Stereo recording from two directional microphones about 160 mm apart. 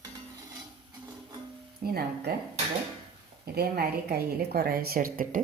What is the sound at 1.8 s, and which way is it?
Speech, 70° right (ahead or behind).